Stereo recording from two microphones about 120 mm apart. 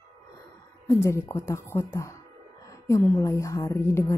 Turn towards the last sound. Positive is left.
turn(degrees=20)  # may be behind; listen again after turning